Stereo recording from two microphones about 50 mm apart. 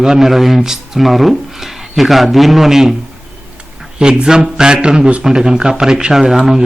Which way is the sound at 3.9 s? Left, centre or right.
Centre.